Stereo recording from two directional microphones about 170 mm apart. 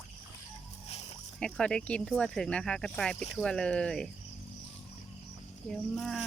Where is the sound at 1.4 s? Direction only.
5° left (ahead or behind).